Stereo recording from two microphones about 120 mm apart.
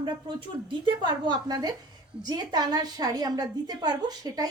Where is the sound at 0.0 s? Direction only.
40° right (ahead or behind).